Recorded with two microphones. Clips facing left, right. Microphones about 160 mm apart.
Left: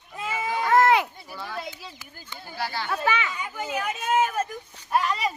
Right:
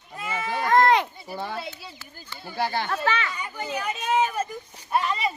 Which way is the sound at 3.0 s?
15° left (ahead or behind).